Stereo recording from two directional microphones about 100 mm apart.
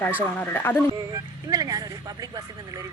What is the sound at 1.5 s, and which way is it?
Speech, 40° right (ahead or behind).